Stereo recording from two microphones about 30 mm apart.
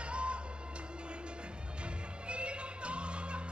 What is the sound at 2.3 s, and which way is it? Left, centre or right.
Music, right.